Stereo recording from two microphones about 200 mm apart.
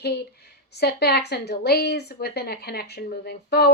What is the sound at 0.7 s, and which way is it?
Speech, 55° left (ahead or behind).